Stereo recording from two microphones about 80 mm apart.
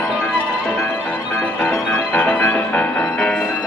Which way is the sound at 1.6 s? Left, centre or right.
Left.